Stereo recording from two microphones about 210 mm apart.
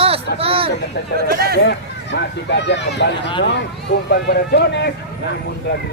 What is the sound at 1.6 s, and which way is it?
Speech, 55° left (ahead or behind).